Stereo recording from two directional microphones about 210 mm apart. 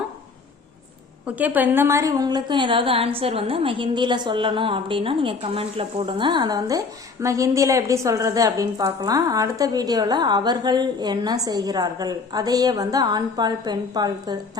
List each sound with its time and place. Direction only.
1.2 s a woman's voice: 5° right (ahead or behind)